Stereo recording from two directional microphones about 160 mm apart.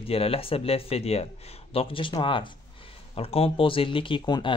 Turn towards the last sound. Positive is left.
turn(degrees=30)  # may be behind; listen again after turning